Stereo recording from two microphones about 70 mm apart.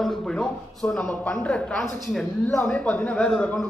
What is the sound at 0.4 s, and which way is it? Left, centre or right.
A man's voice, centre.